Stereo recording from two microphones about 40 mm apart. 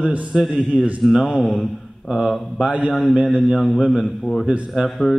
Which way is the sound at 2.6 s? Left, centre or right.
Right.